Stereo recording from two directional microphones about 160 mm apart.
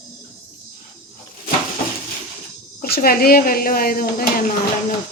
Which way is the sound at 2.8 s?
70° left (ahead or behind).